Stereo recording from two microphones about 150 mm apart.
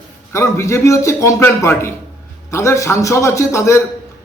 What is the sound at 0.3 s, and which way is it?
A man's voice, 20° left (ahead or behind).